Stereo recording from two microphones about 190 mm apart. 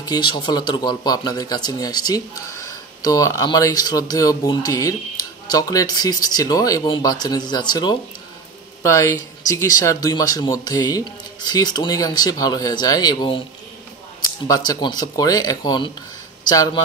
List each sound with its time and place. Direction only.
0.0 s speech: 20° left (ahead or behind)
14.5 s speech: 20° left (ahead or behind)